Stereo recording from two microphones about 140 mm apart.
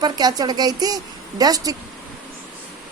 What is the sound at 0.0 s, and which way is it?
A woman's voice, 30° right (ahead or behind).